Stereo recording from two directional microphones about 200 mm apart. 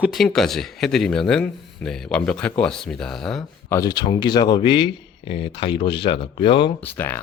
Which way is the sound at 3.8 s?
20° left (ahead or behind).